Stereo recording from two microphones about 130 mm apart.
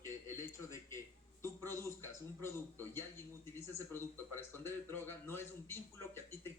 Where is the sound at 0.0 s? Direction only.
20° left (ahead or behind).